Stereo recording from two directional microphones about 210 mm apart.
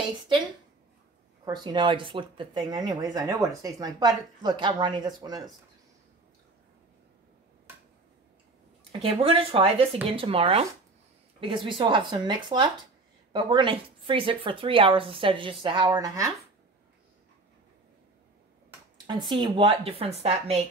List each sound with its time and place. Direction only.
1.4 s speech: 20° right (ahead or behind)
9.0 s speech: 25° right (ahead or behind)
19.0 s speech: 20° right (ahead or behind)